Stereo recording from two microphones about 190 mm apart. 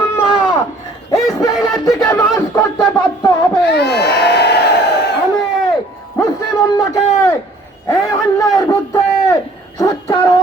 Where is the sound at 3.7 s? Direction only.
60° left (ahead or behind).